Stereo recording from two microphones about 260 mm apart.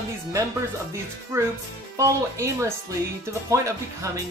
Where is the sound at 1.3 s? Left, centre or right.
Centre.